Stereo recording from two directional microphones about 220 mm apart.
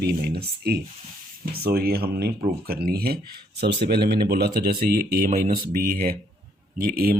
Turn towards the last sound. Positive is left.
turn(degrees=-40)  # may be behind; listen again after turning